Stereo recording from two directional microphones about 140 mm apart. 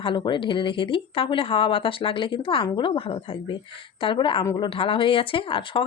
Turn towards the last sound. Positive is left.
turn(degrees=40)  # may be behind; listen again after turning